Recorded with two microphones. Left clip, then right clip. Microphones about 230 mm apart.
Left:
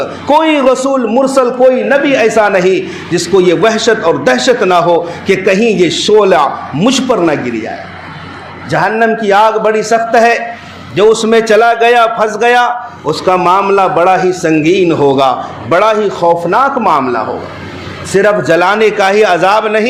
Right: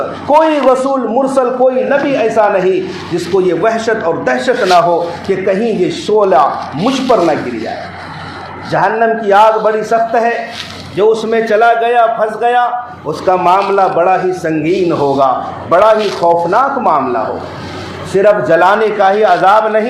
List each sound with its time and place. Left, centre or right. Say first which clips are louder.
0.3 s a man's voice: even; left
8.7 s a man's voice: left 1 dB; left